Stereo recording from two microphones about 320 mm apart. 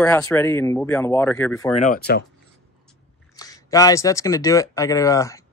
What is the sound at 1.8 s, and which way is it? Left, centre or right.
Speech, left.